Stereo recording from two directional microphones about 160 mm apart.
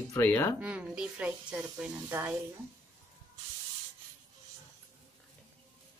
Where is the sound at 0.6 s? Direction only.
5° right (ahead or behind).